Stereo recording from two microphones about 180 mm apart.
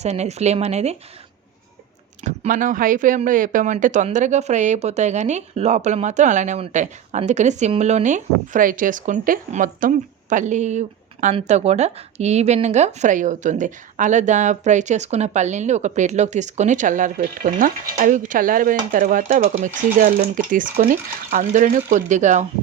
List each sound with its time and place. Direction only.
0.0 s speech: 40° right (ahead or behind)
2.2 s speech: 45° right (ahead or behind)